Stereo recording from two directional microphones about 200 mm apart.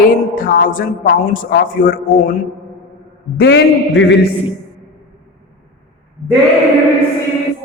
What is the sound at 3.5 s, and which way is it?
Speech, 70° left (ahead or behind).